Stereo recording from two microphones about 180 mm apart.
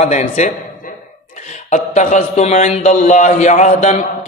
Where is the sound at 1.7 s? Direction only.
40° left (ahead or behind).